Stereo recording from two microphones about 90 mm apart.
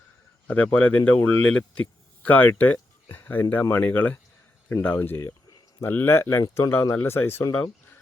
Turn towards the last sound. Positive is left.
turn(degrees=30)  # may be behind; listen again after turning